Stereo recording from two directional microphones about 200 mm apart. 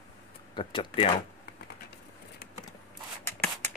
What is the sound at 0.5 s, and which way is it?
Speech, 25° left (ahead or behind).